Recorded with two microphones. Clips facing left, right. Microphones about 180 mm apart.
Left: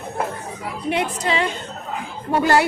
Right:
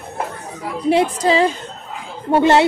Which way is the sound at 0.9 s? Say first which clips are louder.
Right 7 dB; 35° right (ahead or behind).